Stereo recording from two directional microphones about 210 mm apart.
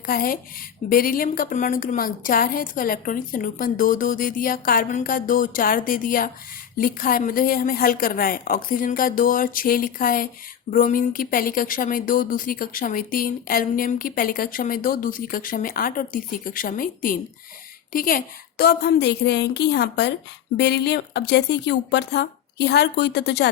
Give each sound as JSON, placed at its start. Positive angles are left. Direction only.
{"t": 0.0, "sound": "a woman's voice", "side_deg": 45}